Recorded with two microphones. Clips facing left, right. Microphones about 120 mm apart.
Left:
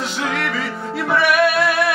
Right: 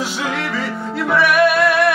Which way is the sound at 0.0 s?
5° right (ahead or behind).